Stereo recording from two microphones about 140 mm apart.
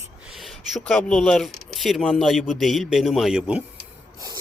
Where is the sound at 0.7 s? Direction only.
5° left (ahead or behind).